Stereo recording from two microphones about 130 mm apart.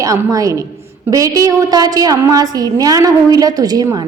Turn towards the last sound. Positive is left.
turn(degrees=-30)  # may be behind; listen again after turning